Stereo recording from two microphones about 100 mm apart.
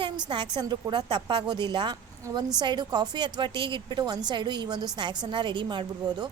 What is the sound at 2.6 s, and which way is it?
A woman's voice, 45° right (ahead or behind).